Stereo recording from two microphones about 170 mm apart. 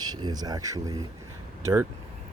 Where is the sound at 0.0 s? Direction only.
25° right (ahead or behind).